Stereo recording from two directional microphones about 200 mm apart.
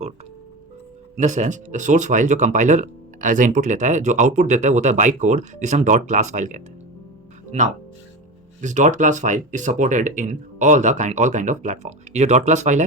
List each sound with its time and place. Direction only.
1.1 s speech: 35° right (ahead or behind)